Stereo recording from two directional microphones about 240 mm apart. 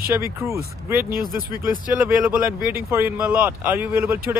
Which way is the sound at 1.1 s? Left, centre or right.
Right.